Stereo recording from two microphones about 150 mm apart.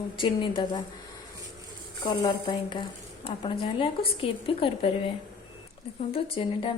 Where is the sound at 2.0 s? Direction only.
25° left (ahead or behind).